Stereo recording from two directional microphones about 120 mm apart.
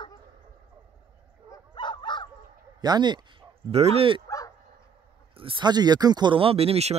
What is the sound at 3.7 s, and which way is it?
Speech, 55° right (ahead or behind).